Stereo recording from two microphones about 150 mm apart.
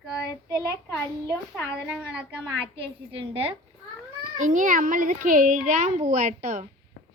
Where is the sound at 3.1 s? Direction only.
40° right (ahead or behind).